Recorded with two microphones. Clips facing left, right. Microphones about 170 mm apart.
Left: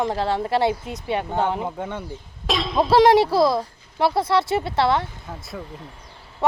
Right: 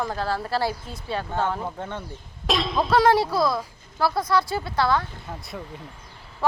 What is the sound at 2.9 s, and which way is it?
Speech, 25° left (ahead or behind).